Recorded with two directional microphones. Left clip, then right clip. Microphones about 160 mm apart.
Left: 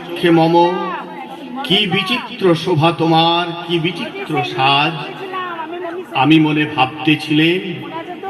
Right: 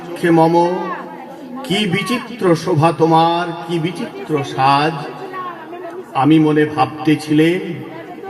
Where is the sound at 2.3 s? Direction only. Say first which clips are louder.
Even; 35° right (ahead or behind).